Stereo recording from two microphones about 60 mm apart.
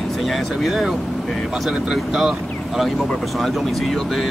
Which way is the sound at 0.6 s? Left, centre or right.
Centre.